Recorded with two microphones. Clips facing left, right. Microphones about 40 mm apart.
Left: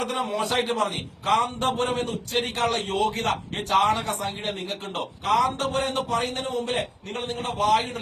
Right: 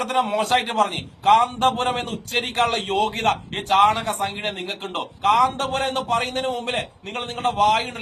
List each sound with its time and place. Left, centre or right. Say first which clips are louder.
0.0 s a man's voice: right 5 dB; right